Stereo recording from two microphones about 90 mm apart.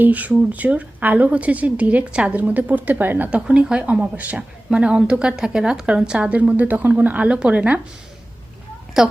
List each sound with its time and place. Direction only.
0.0 s speech: 15° right (ahead or behind)
9.0 s speech: 10° right (ahead or behind)